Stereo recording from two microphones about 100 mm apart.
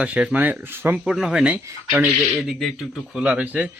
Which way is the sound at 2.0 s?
Centre (ahead or behind).